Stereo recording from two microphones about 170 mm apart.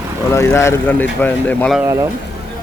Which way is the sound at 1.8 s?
20° right (ahead or behind).